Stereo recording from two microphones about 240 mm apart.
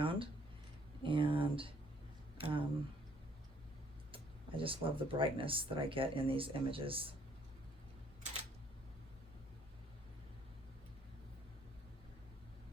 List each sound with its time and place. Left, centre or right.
0.0 s a sound: right
1.0 s speech: right
4.1 s speech: right